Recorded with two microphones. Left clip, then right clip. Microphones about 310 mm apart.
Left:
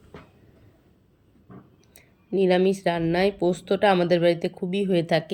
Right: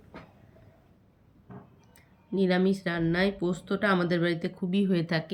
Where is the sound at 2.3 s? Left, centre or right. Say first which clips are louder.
Left 6 dB; centre.